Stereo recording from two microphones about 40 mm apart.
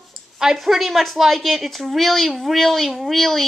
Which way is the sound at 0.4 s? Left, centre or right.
Centre.